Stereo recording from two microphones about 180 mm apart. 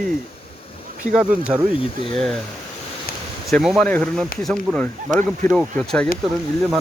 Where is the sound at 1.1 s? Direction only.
5° right (ahead or behind).